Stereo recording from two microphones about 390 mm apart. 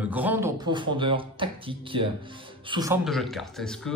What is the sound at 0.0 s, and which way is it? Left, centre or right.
A man's voice, centre.